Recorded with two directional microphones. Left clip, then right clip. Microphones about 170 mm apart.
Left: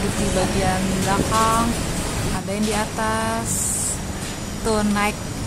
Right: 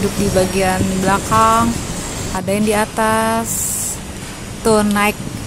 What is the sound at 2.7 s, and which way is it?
Speech, 40° right (ahead or behind).